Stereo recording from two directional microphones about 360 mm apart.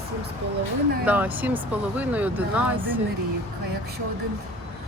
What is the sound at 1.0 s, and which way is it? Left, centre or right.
Speech, centre.